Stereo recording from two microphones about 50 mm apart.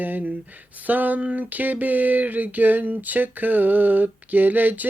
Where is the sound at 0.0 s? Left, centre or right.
Right.